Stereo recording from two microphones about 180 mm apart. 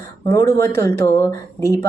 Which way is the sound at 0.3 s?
20° left (ahead or behind).